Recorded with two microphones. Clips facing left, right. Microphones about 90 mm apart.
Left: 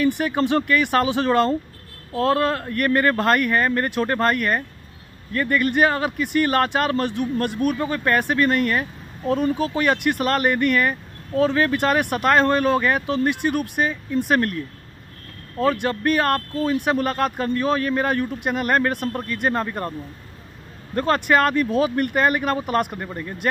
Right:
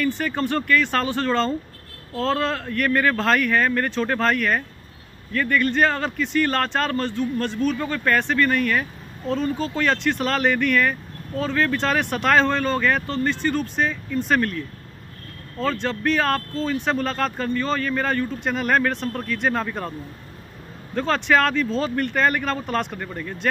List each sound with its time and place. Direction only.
0.2 s speech: 15° left (ahead or behind)
15.6 s speech: 15° left (ahead or behind)
20.9 s speech: 5° left (ahead or behind)